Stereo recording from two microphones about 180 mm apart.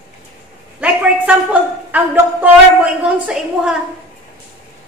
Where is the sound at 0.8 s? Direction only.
5° right (ahead or behind).